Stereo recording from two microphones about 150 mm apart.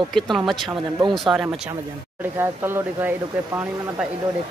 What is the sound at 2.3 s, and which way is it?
Speech, 15° right (ahead or behind).